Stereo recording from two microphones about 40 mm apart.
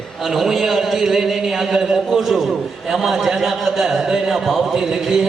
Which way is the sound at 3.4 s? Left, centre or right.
Centre.